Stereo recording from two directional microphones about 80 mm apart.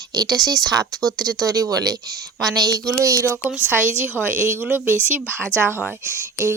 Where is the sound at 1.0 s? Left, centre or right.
Centre.